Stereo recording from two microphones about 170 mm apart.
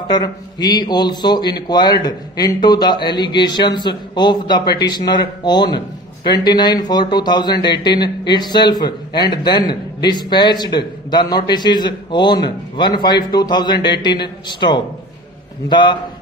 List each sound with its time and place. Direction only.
0.1 s a man's voice: 25° left (ahead or behind)